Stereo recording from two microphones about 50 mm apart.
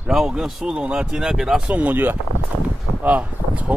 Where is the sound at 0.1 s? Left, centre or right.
Centre.